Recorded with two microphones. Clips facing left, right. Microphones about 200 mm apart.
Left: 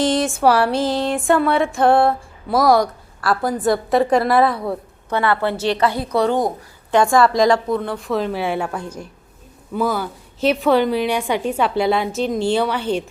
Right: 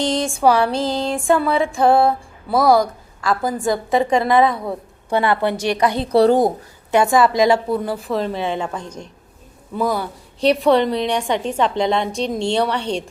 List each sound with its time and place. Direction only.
0.0 s speech: 5° left (ahead or behind)
5.1 s a woman's voice: 15° right (ahead or behind)
6.1 s a woman's voice: 35° right (ahead or behind)
6.9 s speech: 5° right (ahead or behind)